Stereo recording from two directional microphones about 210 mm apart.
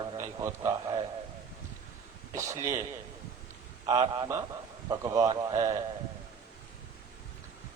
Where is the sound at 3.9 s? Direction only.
20° right (ahead or behind).